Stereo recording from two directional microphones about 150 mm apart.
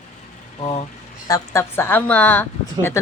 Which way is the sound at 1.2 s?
20° left (ahead or behind).